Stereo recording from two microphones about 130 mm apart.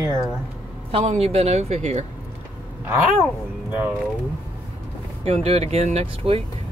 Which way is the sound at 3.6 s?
10° right (ahead or behind).